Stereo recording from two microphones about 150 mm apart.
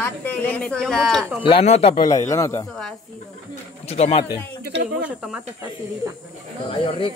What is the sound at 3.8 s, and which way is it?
Speech, 45° left (ahead or behind).